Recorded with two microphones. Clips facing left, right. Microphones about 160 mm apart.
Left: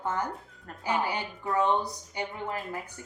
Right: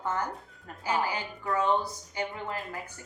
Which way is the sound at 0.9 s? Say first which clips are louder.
Even; 20° left (ahead or behind).